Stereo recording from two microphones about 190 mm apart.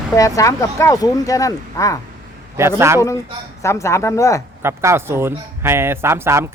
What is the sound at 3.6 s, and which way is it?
Speech, 15° left (ahead or behind).